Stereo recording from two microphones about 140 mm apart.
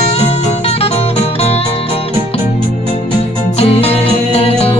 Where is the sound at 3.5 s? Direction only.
45° left (ahead or behind).